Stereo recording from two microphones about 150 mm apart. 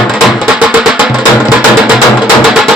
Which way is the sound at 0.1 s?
5° right (ahead or behind).